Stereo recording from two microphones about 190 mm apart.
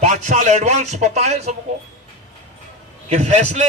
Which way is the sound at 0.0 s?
40° right (ahead or behind).